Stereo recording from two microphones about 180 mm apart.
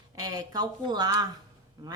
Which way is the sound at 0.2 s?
20° right (ahead or behind).